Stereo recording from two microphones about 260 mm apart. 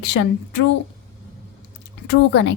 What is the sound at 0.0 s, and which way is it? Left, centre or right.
Speech, left.